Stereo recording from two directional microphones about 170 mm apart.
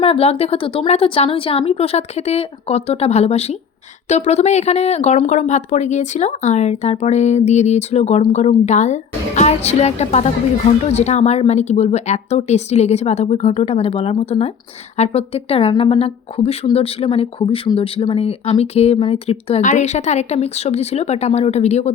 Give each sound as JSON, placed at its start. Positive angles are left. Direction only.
{"t": 0.0, "sound": "speech", "side_deg": 35}